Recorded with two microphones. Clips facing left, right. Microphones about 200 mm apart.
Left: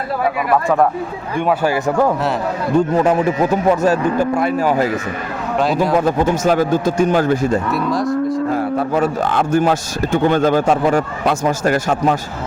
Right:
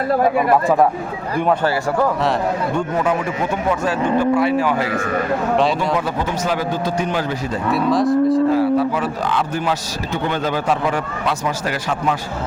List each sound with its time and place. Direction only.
2.7 s a man's voice: 35° left (ahead or behind)
6.0 s a man's voice: 45° left (ahead or behind)
7.7 s cattle: centre (ahead or behind)
8.5 s a man's voice: 50° left (ahead or behind)